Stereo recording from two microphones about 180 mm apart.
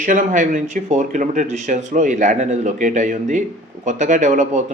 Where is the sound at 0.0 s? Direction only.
45° right (ahead or behind).